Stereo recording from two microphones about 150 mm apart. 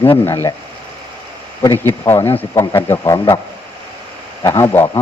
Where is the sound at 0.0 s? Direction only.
15° left (ahead or behind).